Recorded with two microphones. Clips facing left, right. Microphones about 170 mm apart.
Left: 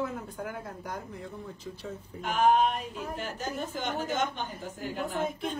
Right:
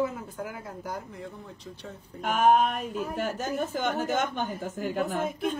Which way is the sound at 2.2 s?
50° right (ahead or behind).